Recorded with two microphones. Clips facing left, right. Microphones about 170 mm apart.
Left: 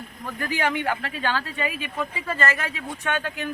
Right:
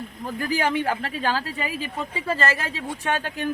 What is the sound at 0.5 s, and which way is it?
Speech, 35° right (ahead or behind).